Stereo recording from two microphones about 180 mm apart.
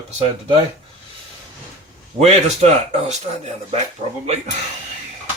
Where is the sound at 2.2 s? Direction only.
35° right (ahead or behind).